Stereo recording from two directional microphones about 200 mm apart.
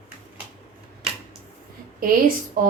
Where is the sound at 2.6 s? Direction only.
45° right (ahead or behind).